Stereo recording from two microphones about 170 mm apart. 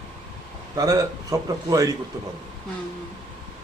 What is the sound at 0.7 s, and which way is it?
A man's voice, 20° right (ahead or behind).